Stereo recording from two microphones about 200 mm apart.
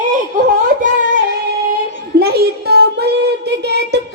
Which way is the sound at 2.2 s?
50° right (ahead or behind).